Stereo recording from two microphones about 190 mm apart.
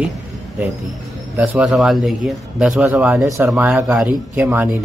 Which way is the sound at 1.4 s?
5° right (ahead or behind).